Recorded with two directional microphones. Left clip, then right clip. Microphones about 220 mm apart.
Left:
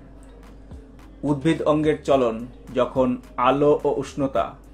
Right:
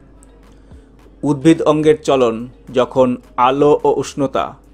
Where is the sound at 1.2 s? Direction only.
50° right (ahead or behind).